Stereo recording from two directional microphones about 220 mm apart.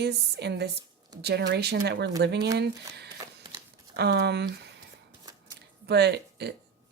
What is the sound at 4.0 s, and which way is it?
Speech, 50° right (ahead or behind).